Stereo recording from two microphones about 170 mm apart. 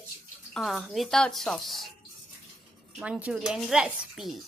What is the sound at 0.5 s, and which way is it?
Speech, centre (ahead or behind).